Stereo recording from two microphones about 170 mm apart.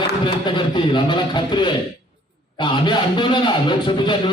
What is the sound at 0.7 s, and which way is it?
Speech, 30° left (ahead or behind).